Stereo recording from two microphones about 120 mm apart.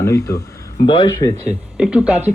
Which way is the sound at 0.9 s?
40° left (ahead or behind).